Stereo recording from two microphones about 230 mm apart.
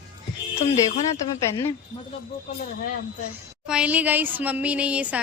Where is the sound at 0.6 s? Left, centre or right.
Left.